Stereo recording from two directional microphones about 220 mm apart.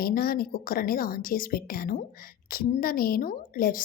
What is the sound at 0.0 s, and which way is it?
Speech, 40° left (ahead or behind).